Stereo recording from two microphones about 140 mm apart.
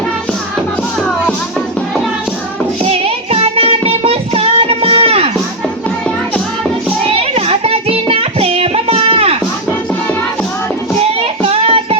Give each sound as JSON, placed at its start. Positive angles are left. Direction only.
{"t": 2.9, "sound": "music", "side_deg": -45}
{"t": 7.2, "sound": "child singing", "side_deg": -45}
{"t": 11.6, "sound": "child singing", "side_deg": -45}